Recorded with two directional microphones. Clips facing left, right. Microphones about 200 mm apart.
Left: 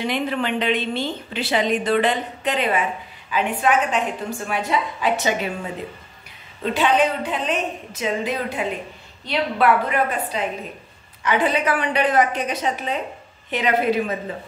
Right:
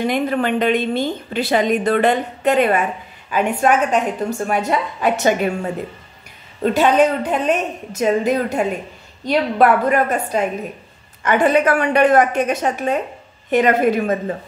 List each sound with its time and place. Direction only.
0.0 s a woman's voice: 45° right (ahead or behind)